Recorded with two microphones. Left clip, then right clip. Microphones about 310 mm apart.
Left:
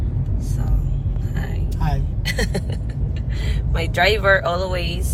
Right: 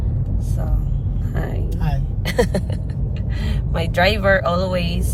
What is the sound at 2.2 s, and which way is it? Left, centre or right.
Speech, centre.